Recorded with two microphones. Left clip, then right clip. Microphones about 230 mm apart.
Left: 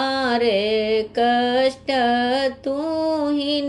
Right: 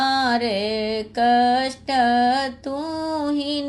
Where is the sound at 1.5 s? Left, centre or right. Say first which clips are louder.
Left 1 dB; right.